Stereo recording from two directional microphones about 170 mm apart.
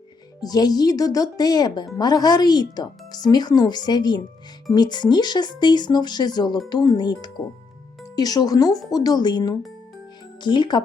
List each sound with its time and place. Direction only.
0.3 s speech: 25° left (ahead or behind)